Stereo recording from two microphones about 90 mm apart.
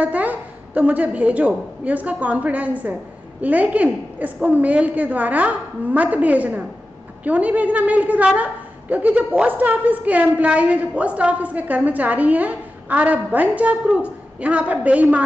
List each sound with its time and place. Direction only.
0.0 s a woman's voice: 15° right (ahead or behind)